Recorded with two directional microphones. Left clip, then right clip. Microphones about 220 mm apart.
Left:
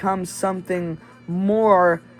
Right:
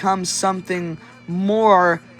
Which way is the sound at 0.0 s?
15° right (ahead or behind).